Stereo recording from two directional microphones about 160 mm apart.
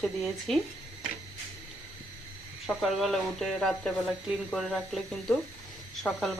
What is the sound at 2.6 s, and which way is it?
Speech, centre (ahead or behind).